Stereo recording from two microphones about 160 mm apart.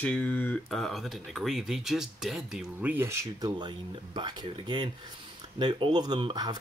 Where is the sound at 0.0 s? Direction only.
10° left (ahead or behind).